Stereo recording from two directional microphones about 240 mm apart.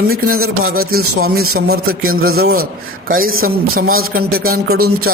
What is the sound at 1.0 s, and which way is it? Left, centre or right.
Speech, right.